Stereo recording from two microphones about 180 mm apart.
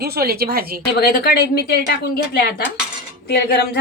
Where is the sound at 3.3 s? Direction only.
60° left (ahead or behind).